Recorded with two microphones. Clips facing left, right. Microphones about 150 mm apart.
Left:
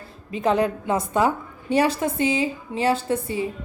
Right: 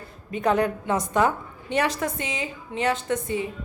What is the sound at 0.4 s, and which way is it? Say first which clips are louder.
A woman's voice: left 1 dB; 25° left (ahead or behind).